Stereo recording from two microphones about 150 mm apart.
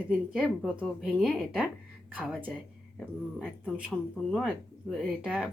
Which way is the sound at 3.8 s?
5° right (ahead or behind).